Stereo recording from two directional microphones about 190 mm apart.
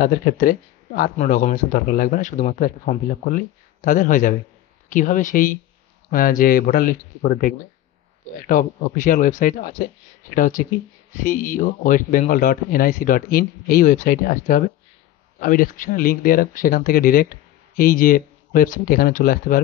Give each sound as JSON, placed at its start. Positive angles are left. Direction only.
{"t": 0.0, "sound": "speech", "side_deg": 50}